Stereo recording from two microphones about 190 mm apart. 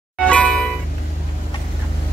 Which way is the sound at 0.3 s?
5° left (ahead or behind).